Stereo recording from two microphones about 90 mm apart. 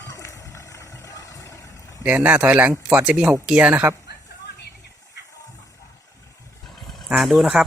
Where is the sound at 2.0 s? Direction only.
15° right (ahead or behind).